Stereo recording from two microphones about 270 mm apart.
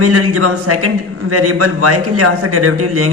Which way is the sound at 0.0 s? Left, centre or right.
Right.